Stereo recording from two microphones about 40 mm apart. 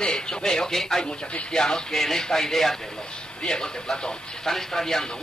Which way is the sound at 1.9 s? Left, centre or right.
Centre.